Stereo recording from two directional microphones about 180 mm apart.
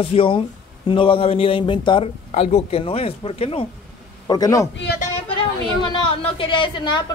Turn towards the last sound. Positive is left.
turn(degrees=25)  # may be behind; listen again after turning